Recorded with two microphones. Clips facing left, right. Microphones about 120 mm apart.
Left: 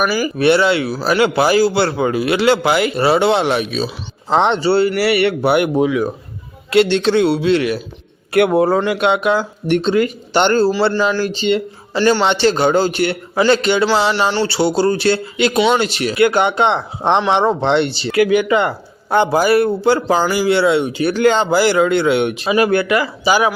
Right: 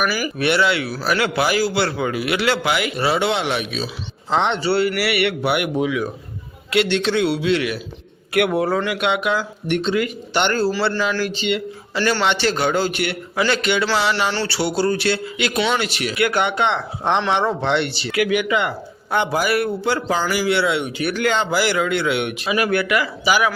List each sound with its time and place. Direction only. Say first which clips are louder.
0.0 s speech: left 6 dB; 25° left (ahead or behind)